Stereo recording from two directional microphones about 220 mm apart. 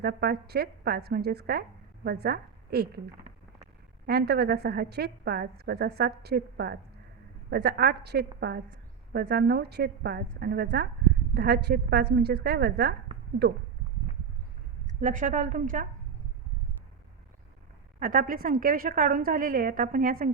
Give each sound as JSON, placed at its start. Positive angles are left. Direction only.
{"t": 0.0, "sound": "a woman's voice", "side_deg": -45}
{"t": 14.8, "sound": "a woman's voice", "side_deg": -35}
{"t": 18.0, "sound": "a woman's voice", "side_deg": -40}